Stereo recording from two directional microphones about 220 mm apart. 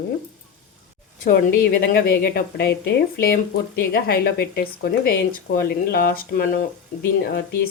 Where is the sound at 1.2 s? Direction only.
40° left (ahead or behind).